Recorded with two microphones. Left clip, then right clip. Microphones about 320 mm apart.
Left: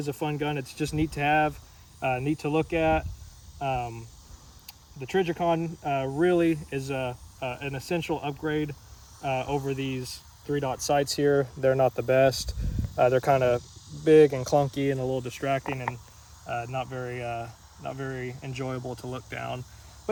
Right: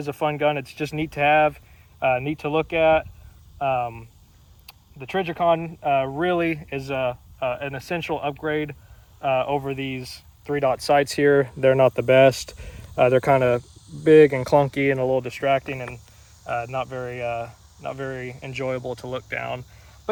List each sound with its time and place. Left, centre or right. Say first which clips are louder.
0.1 s speech: right 9 dB; centre
10.4 s speech: right 8 dB; right
11.1 s speech: right 6 dB; right
15.1 s speech: right 7 dB; centre